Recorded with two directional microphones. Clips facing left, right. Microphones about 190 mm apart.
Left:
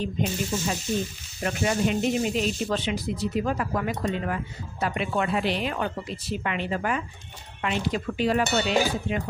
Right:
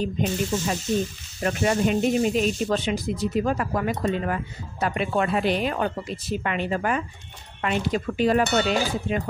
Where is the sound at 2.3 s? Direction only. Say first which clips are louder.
Right 3 dB; 45° right (ahead or behind).